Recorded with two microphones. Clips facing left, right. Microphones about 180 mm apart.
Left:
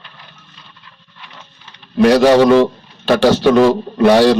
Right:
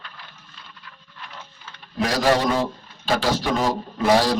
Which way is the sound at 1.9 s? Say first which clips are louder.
Left 11 dB; 70° left (ahead or behind).